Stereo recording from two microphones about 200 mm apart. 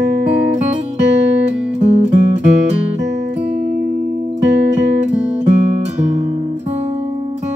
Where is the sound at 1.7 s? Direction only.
35° right (ahead or behind).